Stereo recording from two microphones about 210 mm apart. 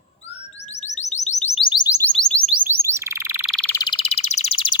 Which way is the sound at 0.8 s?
35° left (ahead or behind).